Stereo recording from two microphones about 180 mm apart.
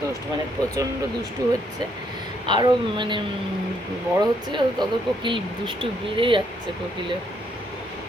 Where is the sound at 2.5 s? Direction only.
25° right (ahead or behind).